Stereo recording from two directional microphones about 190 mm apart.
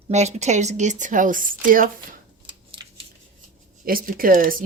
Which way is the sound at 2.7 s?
25° right (ahead or behind).